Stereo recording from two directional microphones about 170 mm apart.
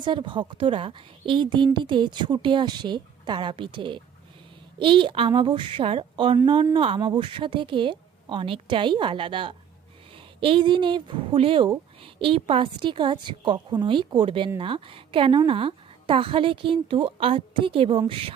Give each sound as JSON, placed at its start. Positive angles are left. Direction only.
{"t": 0.0, "sound": "a woman's voice", "side_deg": -30}